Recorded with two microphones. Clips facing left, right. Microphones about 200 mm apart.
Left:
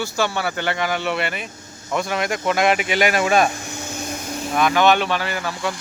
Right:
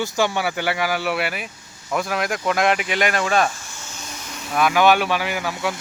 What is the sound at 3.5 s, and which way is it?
Vacuum cleaner, 65° left (ahead or behind).